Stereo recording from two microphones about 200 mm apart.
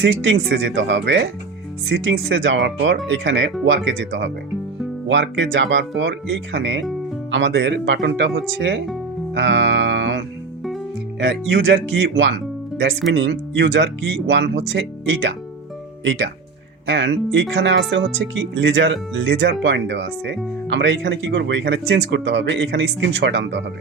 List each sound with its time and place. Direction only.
0.0 s speech: 65° right (ahead or behind)
9.3 s music: 60° right (ahead or behind)
11.2 s speech: 60° right (ahead or behind)